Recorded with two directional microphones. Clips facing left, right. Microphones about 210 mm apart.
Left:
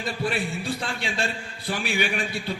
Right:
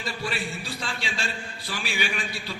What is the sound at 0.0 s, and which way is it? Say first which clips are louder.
A man's voice: left 4 dB; 55° left (ahead or behind).